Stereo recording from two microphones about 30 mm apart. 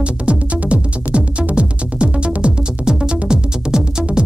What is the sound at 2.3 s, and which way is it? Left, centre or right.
Music, right.